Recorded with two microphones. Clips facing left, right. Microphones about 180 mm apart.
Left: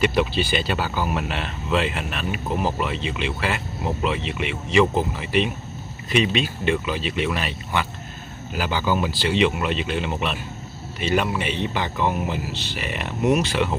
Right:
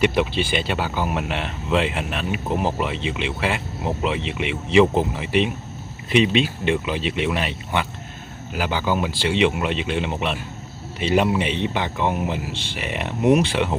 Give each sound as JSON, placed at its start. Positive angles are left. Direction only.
{"t": 0.0, "sound": "speech", "side_deg": -20}